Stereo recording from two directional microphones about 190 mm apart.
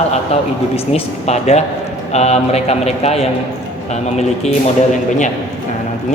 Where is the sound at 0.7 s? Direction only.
35° left (ahead or behind).